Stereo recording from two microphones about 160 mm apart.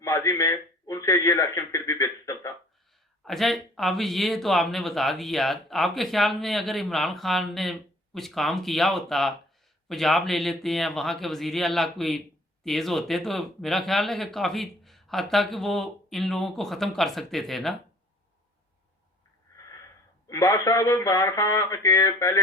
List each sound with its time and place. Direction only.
0.0 s a man's voice: 20° left (ahead or behind)
3.2 s speech: centre (ahead or behind)
19.5 s wheeze: 20° left (ahead or behind)
20.2 s speech: 20° left (ahead or behind)